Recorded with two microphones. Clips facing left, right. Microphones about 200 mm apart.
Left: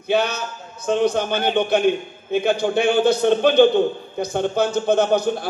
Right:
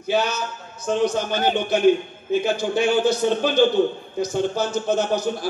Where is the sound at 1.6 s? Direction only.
60° left (ahead or behind).